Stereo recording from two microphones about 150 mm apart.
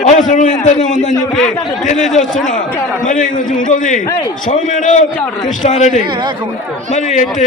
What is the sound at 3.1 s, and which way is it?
A man's voice, 60° left (ahead or behind).